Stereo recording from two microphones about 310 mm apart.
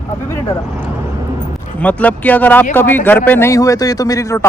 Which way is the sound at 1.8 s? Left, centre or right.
Centre.